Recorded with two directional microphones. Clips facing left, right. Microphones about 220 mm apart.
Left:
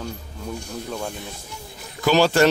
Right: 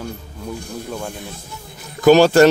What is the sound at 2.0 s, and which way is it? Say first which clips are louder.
Speech: right 7 dB; 50° right (ahead or behind).